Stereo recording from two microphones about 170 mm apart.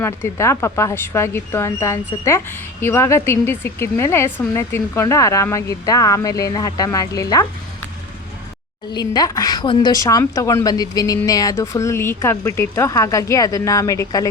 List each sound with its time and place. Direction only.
0.0 s a woman's voice: 15° left (ahead or behind)
8.9 s speech: 25° left (ahead or behind)